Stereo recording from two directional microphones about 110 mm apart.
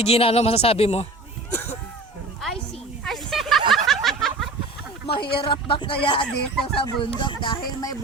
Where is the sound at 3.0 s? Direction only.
5° left (ahead or behind).